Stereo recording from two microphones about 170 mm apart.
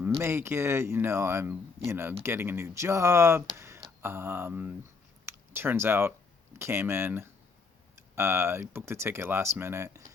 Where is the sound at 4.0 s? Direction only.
15° right (ahead or behind).